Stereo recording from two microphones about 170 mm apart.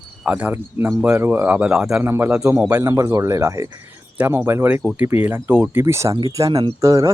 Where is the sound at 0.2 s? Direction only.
5° right (ahead or behind).